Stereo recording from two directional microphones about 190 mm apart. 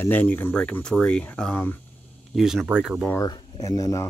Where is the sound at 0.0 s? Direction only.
10° left (ahead or behind).